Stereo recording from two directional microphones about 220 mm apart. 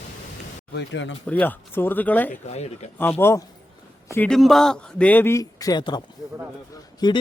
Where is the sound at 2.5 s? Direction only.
30° left (ahead or behind).